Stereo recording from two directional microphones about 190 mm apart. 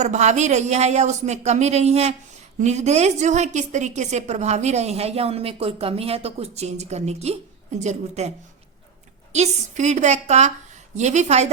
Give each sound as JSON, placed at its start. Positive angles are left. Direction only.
{"t": 0.0, "sound": "a woman's voice", "side_deg": -40}
{"t": 9.3, "sound": "a woman's voice", "side_deg": -35}